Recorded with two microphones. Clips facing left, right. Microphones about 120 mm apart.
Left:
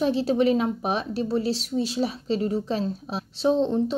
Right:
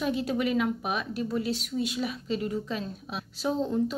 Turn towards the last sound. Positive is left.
turn(degrees=25)  # may be behind; listen again after turning